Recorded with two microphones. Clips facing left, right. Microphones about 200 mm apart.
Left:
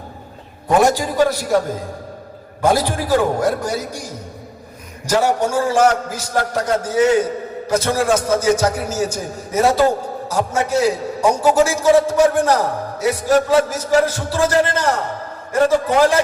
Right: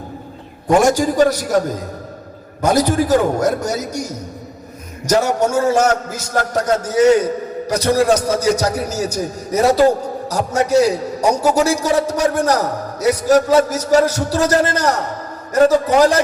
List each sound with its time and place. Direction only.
0.8 s a man's voice: 45° right (ahead or behind)